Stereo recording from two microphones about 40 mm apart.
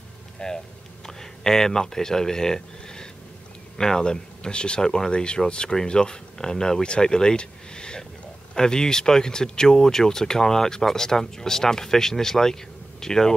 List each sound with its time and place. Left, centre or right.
0.4 s speech: centre
4.8 s speech: centre
5.1 s speech: left